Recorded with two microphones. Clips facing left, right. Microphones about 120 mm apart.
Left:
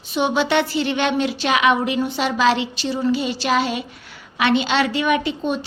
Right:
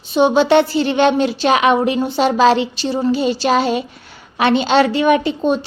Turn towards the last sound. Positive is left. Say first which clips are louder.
# right 6 dB
turn(degrees=-35)  # may be behind; listen again after turning